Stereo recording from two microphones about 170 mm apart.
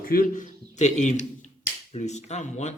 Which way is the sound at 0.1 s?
50° left (ahead or behind).